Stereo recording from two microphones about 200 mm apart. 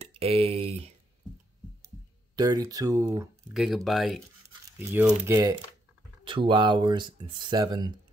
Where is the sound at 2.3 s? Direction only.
20° right (ahead or behind).